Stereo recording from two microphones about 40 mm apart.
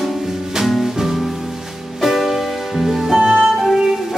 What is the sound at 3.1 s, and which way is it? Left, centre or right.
Music, right.